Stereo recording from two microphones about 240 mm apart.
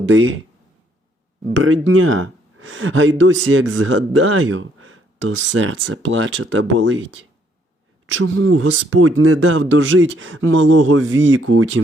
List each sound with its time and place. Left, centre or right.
1.6 s speech: right